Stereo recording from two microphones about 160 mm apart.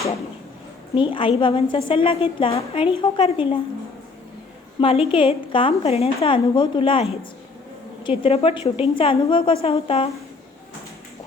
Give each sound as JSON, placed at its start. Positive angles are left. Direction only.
{"t": 0.9, "sound": "a woman's voice", "side_deg": 30}
{"t": 4.8, "sound": "a woman's voice", "side_deg": 35}